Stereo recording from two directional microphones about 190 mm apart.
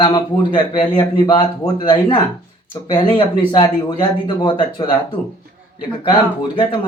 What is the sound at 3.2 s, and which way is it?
A man's voice, 25° left (ahead or behind).